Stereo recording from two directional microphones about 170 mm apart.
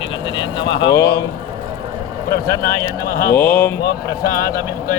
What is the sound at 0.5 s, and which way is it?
Speech, 30° left (ahead or behind).